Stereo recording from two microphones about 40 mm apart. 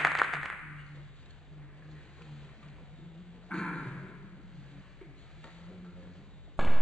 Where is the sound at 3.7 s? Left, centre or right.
Left.